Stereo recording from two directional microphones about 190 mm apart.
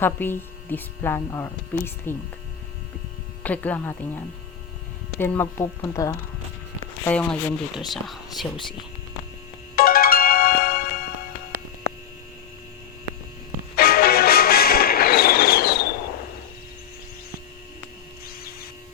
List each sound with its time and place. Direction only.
0.0 s speech: 10° left (ahead or behind)
3.4 s speech: 10° left (ahead or behind)
5.2 s speech: 10° left (ahead or behind)
7.0 s speech: 5° left (ahead or behind)
9.7 s ringtone: 50° left (ahead or behind)
13.7 s music: 55° left (ahead or behind)